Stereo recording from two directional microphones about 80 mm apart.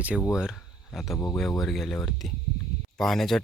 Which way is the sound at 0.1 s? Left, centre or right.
Centre.